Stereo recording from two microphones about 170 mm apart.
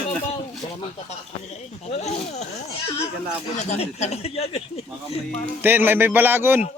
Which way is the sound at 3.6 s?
40° left (ahead or behind).